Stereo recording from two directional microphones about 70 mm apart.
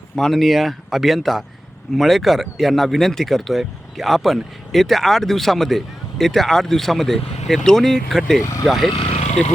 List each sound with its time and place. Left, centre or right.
0.2 s speech: centre
8.4 s speech: left
8.6 s speech: centre